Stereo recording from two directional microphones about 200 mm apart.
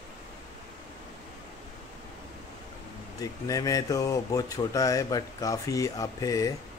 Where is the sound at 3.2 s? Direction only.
15° left (ahead or behind).